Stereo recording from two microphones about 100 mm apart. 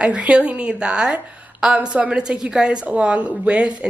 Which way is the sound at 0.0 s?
10° right (ahead or behind).